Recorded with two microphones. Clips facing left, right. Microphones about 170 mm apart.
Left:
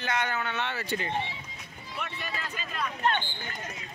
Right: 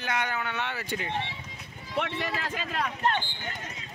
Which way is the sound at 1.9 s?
90° right.